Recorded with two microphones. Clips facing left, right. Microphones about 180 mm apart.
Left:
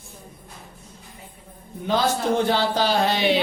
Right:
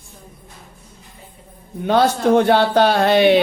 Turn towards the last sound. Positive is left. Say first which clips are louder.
# right 7 dB
turn(degrees=-60)  # may be behind; listen again after turning